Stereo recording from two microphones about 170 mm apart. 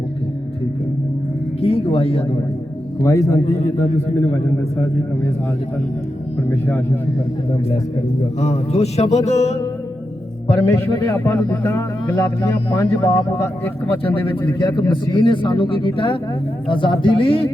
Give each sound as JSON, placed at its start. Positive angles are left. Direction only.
{"t": 1.6, "sound": "mantra", "side_deg": 35}
{"t": 3.0, "sound": "speech", "side_deg": 20}
{"t": 6.5, "sound": "speech", "side_deg": 10}
{"t": 8.4, "sound": "mantra", "side_deg": 40}
{"t": 10.8, "sound": "speech", "side_deg": 15}